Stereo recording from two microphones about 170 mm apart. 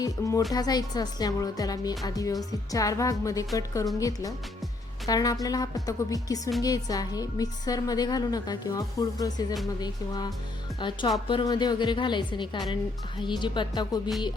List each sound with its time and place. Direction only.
0.0 s a woman's voice: 20° left (ahead or behind)